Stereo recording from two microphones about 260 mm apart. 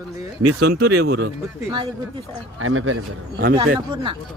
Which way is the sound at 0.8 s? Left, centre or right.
Right.